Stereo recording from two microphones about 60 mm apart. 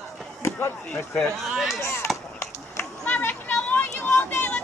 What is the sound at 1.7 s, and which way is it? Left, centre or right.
Speech, left.